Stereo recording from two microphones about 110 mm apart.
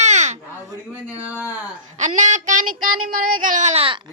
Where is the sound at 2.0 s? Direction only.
90° right.